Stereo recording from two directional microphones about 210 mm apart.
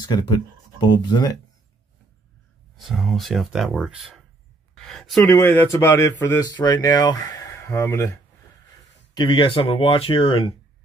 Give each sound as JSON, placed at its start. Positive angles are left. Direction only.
{"t": 0.0, "sound": "speech", "side_deg": 20}
{"t": 2.8, "sound": "speech", "side_deg": 0}
{"t": 9.1, "sound": "speech", "side_deg": 20}